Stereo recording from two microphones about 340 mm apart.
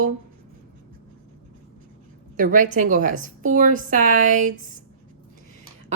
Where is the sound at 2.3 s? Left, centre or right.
Right.